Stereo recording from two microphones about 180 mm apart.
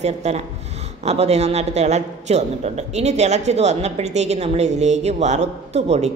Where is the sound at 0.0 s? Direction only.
35° right (ahead or behind).